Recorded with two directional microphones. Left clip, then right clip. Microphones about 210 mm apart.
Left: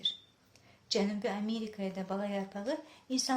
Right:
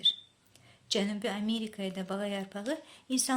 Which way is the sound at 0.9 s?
35° right (ahead or behind).